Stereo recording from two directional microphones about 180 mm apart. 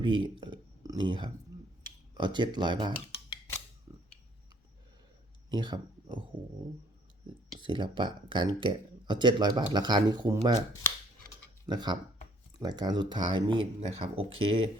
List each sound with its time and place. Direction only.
0.0 s speech: 25° right (ahead or behind)
3.9 s a sound: 25° right (ahead or behind)
5.5 s speech: 25° right (ahead or behind)
7.6 s speech: 25° right (ahead or behind)
11.6 s speech: 25° right (ahead or behind)